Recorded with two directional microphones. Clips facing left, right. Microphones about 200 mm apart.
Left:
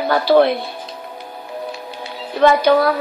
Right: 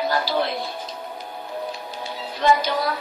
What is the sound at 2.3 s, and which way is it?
Speech, 60° left (ahead or behind).